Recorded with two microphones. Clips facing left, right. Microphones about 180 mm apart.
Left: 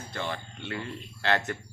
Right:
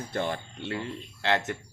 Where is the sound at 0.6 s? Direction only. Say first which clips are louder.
Right 2 dB; 25° right (ahead or behind).